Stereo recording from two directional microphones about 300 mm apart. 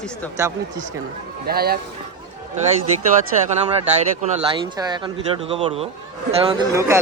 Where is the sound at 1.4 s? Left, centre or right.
Right.